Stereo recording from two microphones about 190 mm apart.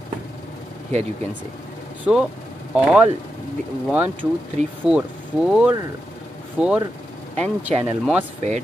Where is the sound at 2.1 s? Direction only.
10° right (ahead or behind).